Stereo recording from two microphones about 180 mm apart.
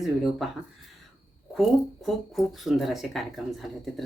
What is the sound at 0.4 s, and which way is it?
Speech, centre (ahead or behind).